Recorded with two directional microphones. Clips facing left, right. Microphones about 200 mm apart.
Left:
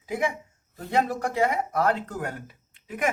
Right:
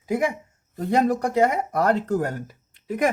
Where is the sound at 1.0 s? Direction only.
40° right (ahead or behind).